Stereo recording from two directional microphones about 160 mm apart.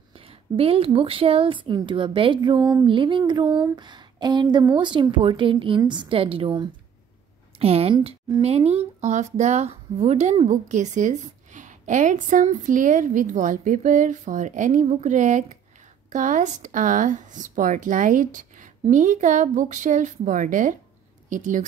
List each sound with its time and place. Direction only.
0.2 s speech: 35° right (ahead or behind)
2.7 s a sound: 30° right (ahead or behind)
4.7 s a woman's voice: 30° right (ahead or behind); by 21.6 s 50° right (ahead or behind)